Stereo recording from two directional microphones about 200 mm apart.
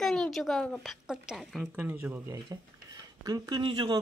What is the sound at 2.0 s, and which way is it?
Speech, 15° right (ahead or behind).